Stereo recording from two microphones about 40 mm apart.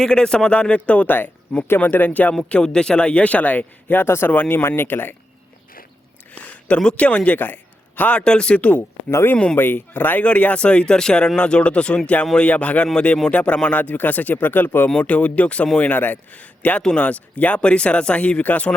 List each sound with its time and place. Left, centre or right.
0.0 s speech: centre
1.0 s speech: left
2.6 s speech: centre; by 3.9 s left
3.9 s speech: left
4.4 s speech: left
6.9 s speech: left
7.3 s a man's voice: left
8.1 s speech: left
9.6 s speech: left
10.2 s speech: left
13.7 s speech: left
14.9 s speech: left
17.6 s speech: left